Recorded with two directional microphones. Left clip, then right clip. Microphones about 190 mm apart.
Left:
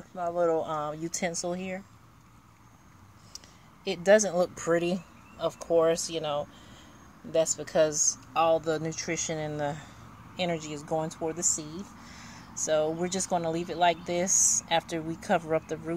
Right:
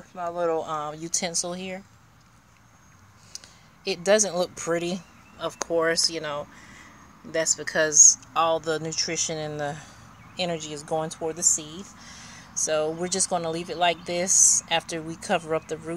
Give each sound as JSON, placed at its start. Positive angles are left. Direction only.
{"t": 0.1, "sound": "speech", "side_deg": 15}
{"t": 3.3, "sound": "speech", "side_deg": 0}